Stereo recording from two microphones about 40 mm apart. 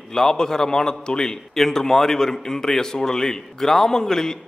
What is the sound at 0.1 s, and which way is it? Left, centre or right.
A man's voice, centre.